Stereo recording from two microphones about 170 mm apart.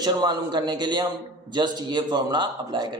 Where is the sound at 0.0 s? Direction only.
25° right (ahead or behind).